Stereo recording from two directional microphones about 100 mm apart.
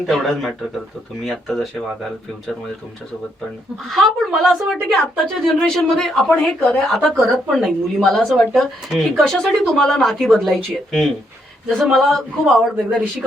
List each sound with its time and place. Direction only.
0.0 s a woman's voice: centre (ahead or behind)
3.8 s a woman's voice: centre (ahead or behind)